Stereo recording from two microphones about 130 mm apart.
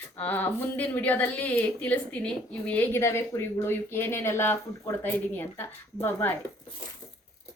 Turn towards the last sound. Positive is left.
turn(degrees=15)  # may be behind; listen again after turning